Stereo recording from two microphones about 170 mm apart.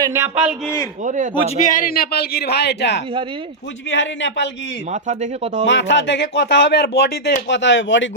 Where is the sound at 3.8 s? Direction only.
90° left.